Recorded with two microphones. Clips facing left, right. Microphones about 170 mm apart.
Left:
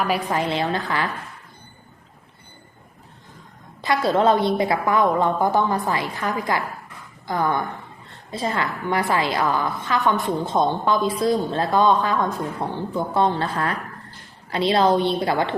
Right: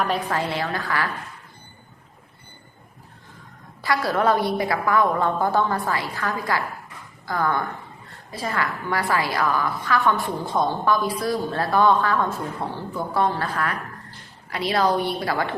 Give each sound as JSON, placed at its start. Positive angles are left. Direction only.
{"t": 0.0, "sound": "a woman's voice", "side_deg": 10}
{"t": 0.4, "sound": "a woman's voice", "side_deg": 20}
{"t": 3.8, "sound": "a woman's voice", "side_deg": 20}